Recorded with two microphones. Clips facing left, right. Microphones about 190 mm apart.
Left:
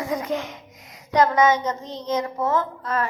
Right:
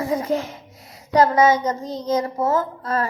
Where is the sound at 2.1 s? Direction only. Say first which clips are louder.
Right 2 dB; 35° right (ahead or behind).